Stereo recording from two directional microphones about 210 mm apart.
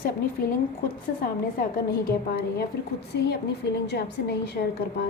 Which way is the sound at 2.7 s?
50° left (ahead or behind).